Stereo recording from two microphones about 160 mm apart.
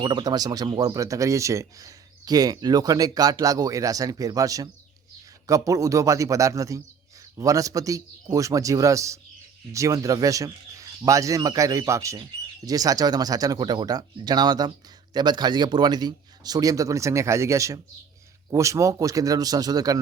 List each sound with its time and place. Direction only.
0.0 s speech: 25° right (ahead or behind)